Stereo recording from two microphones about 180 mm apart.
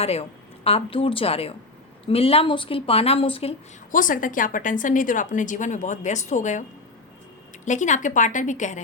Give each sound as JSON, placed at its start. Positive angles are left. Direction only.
{"t": 0.0, "sound": "a woman's voice", "side_deg": 35}
{"t": 3.9, "sound": "a woman's voice", "side_deg": 50}